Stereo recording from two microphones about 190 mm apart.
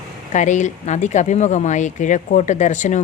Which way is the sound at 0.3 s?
40° left (ahead or behind).